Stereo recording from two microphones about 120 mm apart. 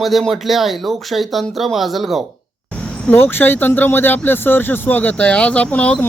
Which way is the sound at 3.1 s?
15° left (ahead or behind).